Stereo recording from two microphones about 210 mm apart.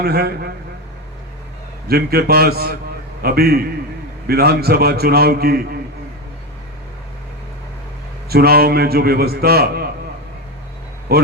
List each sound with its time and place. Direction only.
0.0 s a man's voice: 50° right (ahead or behind)
1.9 s a man's voice: 45° right (ahead or behind)
8.3 s a man's voice: 45° right (ahead or behind)
11.1 s a man's voice: 50° right (ahead or behind)